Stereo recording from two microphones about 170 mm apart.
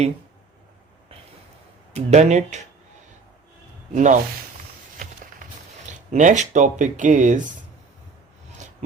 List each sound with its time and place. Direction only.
1.9 s speech: 40° right (ahead or behind)
3.9 s speech: 45° right (ahead or behind)
5.9 s speech: 45° right (ahead or behind)